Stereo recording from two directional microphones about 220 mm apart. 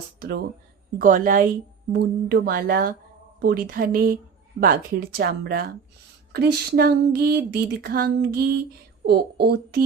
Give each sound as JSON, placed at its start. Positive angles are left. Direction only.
{"t": 0.2, "sound": "speech", "side_deg": -45}